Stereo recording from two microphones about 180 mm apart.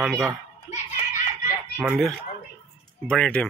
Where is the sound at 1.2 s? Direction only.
50° left (ahead or behind).